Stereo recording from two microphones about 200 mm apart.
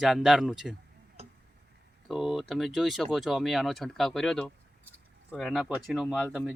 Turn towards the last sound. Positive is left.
turn(degrees=-5)  # may be behind; listen again after turning